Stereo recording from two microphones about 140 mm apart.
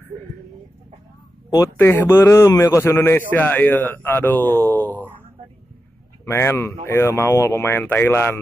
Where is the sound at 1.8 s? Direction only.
15° left (ahead or behind).